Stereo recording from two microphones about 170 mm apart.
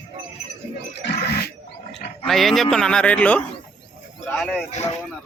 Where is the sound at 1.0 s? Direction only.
70° left (ahead or behind).